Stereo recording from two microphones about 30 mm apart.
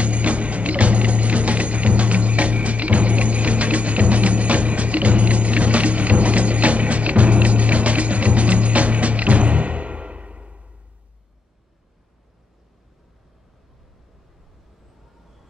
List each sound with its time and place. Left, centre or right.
0.0 s music: right